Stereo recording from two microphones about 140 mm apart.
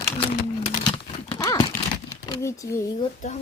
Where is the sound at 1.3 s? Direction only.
25° left (ahead or behind).